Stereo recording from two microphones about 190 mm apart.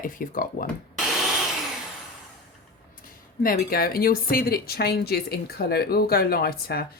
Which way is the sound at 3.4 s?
50° left (ahead or behind).